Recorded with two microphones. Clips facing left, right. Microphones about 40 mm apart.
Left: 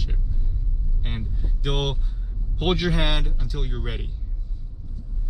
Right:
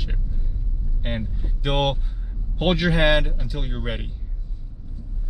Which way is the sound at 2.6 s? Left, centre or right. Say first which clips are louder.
Right 4 dB; centre.